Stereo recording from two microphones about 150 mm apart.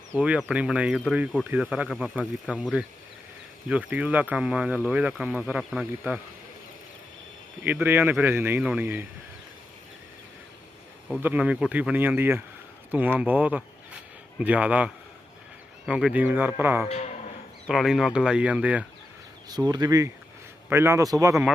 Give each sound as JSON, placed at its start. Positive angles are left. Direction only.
{"t": 0.1, "sound": "speech", "side_deg": -10}
{"t": 7.6, "sound": "speech", "side_deg": -10}
{"t": 11.2, "sound": "speech", "side_deg": -10}
{"t": 16.9, "sound": "moo", "side_deg": 45}
{"t": 17.7, "sound": "speech", "side_deg": 0}
{"t": 19.5, "sound": "speech", "side_deg": -25}